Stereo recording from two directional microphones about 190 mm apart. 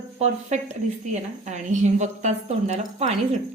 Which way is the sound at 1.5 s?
40° right (ahead or behind).